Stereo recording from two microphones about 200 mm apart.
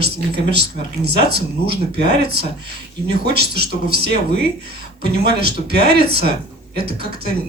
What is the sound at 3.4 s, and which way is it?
Speech, 55° right (ahead or behind).